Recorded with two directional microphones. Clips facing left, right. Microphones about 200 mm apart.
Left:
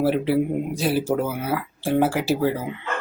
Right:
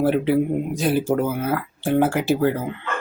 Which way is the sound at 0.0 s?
Centre (ahead or behind).